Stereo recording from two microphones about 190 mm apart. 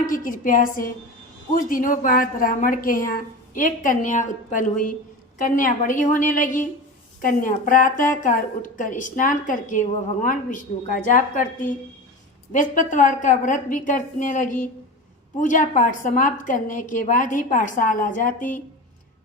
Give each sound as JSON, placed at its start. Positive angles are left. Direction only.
{"t": 0.0, "sound": "a woman's voice", "side_deg": 45}
{"t": 12.5, "sound": "a woman's voice", "side_deg": 40}